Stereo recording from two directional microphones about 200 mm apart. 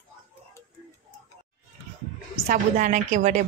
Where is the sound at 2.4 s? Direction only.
35° right (ahead or behind).